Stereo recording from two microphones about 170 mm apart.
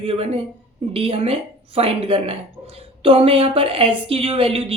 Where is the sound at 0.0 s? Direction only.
35° right (ahead or behind).